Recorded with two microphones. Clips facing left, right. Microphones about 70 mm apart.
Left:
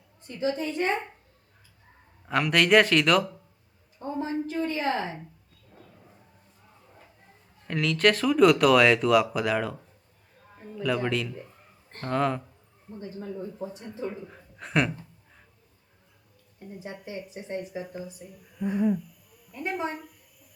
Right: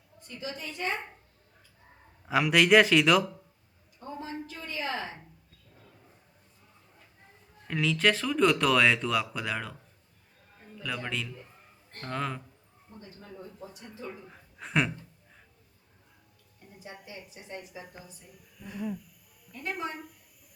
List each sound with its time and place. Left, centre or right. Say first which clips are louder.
0.3 s a woman's voice: left 11 dB; left
2.2 s speech: even; centre
4.2 s a sound: left 12 dB; left
7.7 s speech: left 3 dB; centre
10.8 s speech: left 8 dB; centre
13.7 s speech: left 8 dB; left
14.3 s speech: left 2 dB; centre
16.8 s a woman's voice: left 7 dB; left
18.2 s speech: left 9 dB; centre
18.6 s a woman's voice: left 11 dB; left